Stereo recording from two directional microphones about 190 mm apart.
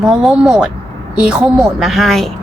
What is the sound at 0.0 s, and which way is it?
A woman's voice, 5° right (ahead or behind).